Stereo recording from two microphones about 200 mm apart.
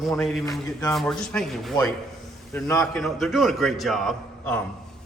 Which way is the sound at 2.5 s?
15° left (ahead or behind).